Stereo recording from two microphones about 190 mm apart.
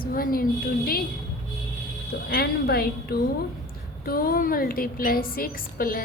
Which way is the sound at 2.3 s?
55° left (ahead or behind).